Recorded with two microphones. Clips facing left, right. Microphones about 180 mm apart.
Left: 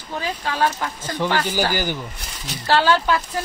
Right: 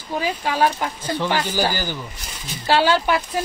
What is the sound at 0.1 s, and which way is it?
Speech, 15° right (ahead or behind).